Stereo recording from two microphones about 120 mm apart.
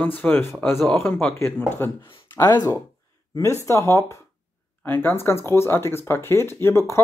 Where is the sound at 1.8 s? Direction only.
20° left (ahead or behind).